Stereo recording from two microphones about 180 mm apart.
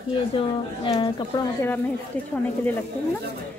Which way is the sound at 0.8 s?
20° left (ahead or behind).